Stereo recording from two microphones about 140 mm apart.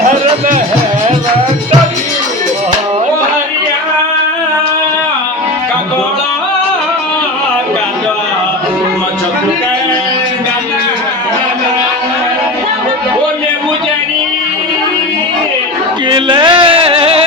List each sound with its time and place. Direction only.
16.0 s music: 35° right (ahead or behind)